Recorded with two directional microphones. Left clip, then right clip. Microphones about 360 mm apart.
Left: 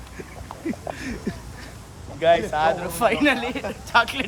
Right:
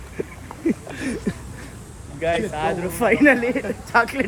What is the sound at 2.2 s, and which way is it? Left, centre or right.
Speech, centre.